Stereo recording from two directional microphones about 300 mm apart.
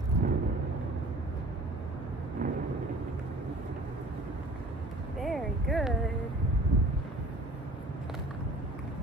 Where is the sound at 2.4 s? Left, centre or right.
Right.